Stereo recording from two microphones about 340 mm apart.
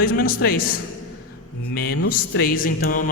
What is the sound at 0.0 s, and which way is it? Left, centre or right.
A man's voice, left.